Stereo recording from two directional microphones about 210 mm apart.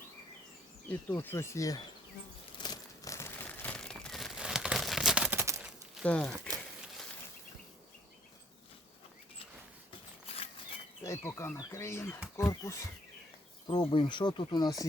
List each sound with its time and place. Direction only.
0.9 s speech: 10° left (ahead or behind)
2.6 s crumpling: 20° left (ahead or behind); by 5.7 s 10° right (ahead or behind)
6.0 s speech: 5° left (ahead or behind)
6.8 s a sound: centre (ahead or behind)
10.2 s bird flight: 30° left (ahead or behind)
11.0 s speech: 15° left (ahead or behind)